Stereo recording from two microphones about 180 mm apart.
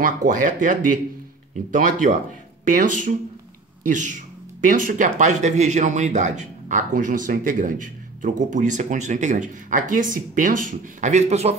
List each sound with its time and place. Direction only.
0.0 s speech: 45° right (ahead or behind)